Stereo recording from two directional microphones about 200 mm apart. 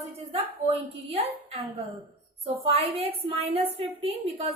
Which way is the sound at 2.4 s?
30° right (ahead or behind).